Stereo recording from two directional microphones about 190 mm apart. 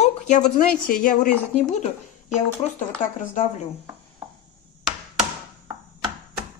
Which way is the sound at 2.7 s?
40° left (ahead or behind).